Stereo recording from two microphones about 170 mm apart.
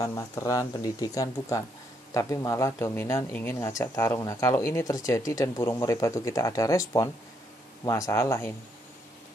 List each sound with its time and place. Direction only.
0.0 s speech: 20° left (ahead or behind)